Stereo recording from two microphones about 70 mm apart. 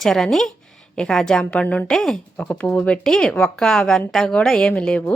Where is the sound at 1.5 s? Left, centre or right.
Centre.